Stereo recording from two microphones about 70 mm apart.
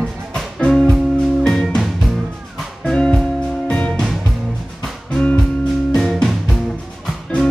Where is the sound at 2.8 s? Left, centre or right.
Centre.